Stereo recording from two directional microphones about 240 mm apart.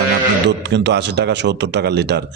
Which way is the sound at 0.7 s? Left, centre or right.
Right.